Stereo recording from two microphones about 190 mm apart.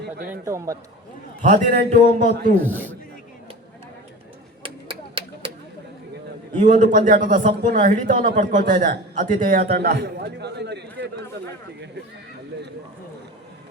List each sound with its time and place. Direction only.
0.3 s a man's voice: 15° right (ahead or behind)
1.4 s a man's voice: 40° right (ahead or behind)
2.6 s a man's voice: 10° right (ahead or behind)
4.6 s a sound: 30° right (ahead or behind)
6.6 s speech: 40° right (ahead or behind); by 11.1 s 65° right (ahead or behind)